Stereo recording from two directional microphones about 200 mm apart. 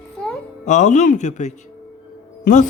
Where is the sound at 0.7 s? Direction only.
35° left (ahead or behind).